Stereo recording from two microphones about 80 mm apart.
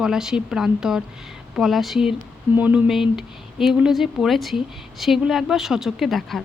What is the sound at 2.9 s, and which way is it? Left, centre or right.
A woman's voice, centre.